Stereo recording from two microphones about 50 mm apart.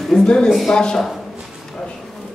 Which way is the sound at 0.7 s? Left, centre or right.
Centre.